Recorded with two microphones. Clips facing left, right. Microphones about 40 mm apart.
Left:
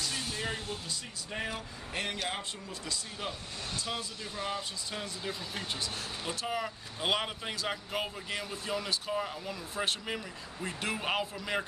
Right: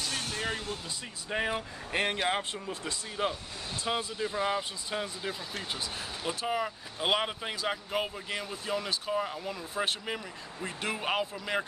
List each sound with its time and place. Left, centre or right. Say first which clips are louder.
0.1 s vehicle: right 2 dB; right
0.8 s speech: right 2 dB; right; by 11.6 s centre